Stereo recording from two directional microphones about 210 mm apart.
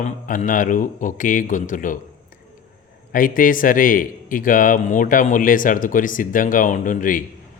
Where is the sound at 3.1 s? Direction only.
40° left (ahead or behind).